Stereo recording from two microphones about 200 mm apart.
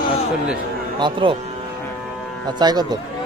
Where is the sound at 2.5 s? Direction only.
20° right (ahead or behind).